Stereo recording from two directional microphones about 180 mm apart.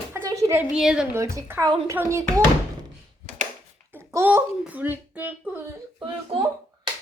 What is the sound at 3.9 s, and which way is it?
A child's voice, 10° right (ahead or behind).